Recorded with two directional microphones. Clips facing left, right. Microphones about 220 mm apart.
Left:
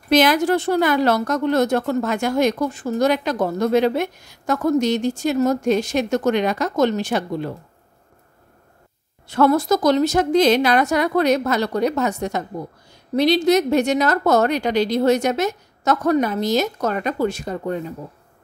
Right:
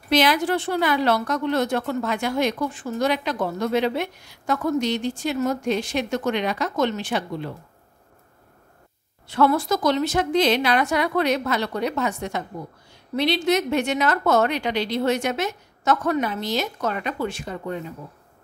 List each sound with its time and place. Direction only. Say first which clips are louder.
0.1 s a woman's voice: left 4 dB; 45° left (ahead or behind)
9.3 s a woman's voice: left 4 dB; 45° left (ahead or behind)